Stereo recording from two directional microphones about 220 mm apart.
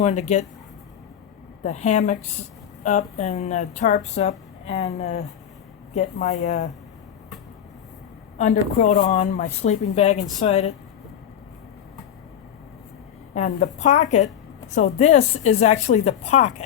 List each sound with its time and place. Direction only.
0.0 s a woman's voice: 30° left (ahead or behind)
1.6 s a woman's voice: 30° left (ahead or behind)
8.4 s a woman's voice: 35° left (ahead or behind)
13.3 s a woman's voice: 35° left (ahead or behind)